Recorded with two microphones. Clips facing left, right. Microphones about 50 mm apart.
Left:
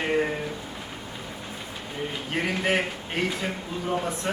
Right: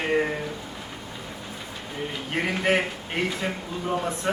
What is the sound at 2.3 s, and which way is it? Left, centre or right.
Speech, centre.